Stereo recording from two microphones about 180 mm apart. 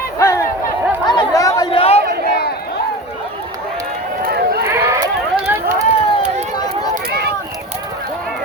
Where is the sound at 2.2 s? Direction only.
55° left (ahead or behind).